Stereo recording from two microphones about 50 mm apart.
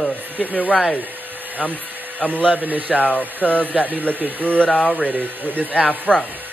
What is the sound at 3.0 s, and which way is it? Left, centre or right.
Speech, left.